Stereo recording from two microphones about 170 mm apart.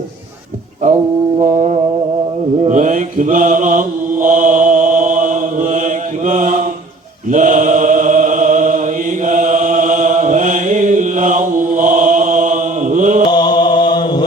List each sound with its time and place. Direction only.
1.4 s mantra: 45° right (ahead or behind)
9.2 s chant: 50° right (ahead or behind)
13.3 s mantra: 25° left (ahead or behind)